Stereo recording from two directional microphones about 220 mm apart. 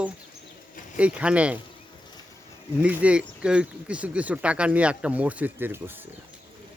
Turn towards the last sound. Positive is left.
turn(degrees=-10)  # may be behind; listen again after turning